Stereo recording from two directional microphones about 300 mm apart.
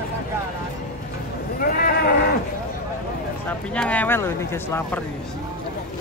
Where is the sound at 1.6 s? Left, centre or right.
Left.